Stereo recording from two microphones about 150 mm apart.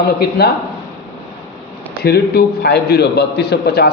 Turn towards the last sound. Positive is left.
turn(degrees=90)